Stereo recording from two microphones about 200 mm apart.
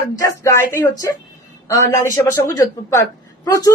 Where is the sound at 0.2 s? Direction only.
15° left (ahead or behind).